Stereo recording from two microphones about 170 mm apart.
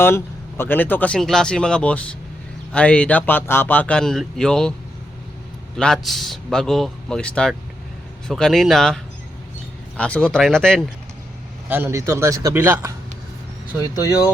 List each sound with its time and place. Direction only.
0.0 s speech: 15° left (ahead or behind)
5.7 s a man's voice: centre (ahead or behind)
10.0 s a man's voice: 5° left (ahead or behind)
11.7 s a man's voice: 15° right (ahead or behind)